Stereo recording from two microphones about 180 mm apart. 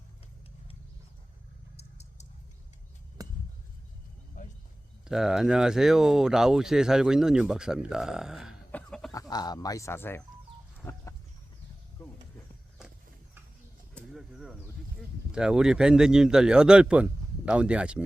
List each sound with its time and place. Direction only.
1.7 s a sound: 35° left (ahead or behind)
3.2 s a sound: 20° right (ahead or behind)
5.0 s speech: 5° right (ahead or behind)
8.7 s chicken: 5° left (ahead or behind)
9.1 s speech: 20° left (ahead or behind)
10.8 s chicken: 15° left (ahead or behind)
12.0 s vehicle: 10° left (ahead or behind)
13.9 s bird: centre (ahead or behind)
15.3 s speech: 5° right (ahead or behind)